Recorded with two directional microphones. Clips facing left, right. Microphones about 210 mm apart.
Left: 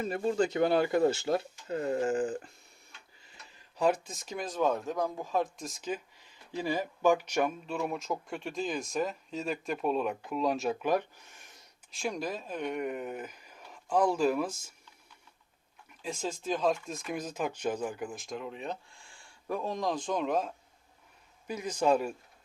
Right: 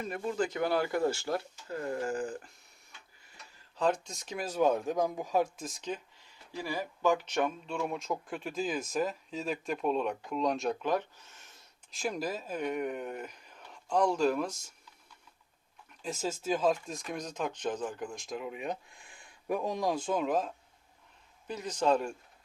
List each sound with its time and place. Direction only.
0.0 s speech: 30° left (ahead or behind)
3.5 s speech: 10° left (ahead or behind); by 5.5 s 15° right (ahead or behind)
5.5 s speech: centre (ahead or behind)
6.1 s speech: 20° left (ahead or behind)
11.9 s speech: centre (ahead or behind)
16.0 s speech: 5° right (ahead or behind)
21.4 s a man's voice: 10° left (ahead or behind)